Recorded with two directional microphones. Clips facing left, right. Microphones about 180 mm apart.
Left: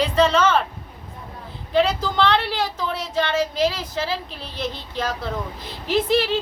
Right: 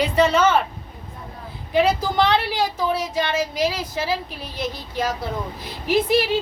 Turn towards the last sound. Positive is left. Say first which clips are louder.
# right 1 dB
turn(degrees=-10)  # may be behind; listen again after turning